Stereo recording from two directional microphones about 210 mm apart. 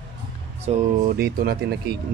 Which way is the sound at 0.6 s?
45° right (ahead or behind).